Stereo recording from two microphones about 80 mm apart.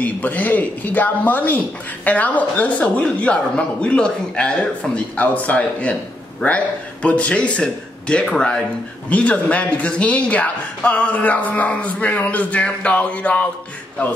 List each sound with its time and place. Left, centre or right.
0.0 s speech: left